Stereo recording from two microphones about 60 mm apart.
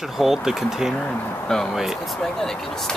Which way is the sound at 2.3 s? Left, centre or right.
Centre.